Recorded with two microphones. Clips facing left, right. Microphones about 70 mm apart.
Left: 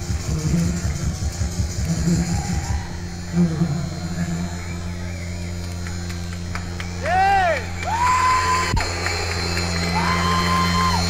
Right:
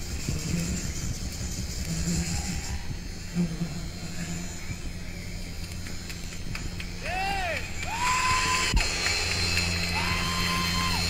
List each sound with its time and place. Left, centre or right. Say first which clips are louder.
0.3 s music: left 9 dB; left
3.3 s a sound: left 10 dB; left
7.1 s music: left 14 dB; left